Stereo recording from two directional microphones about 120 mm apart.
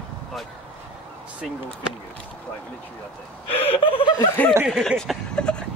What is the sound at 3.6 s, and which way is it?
Speech, 50° left (ahead or behind).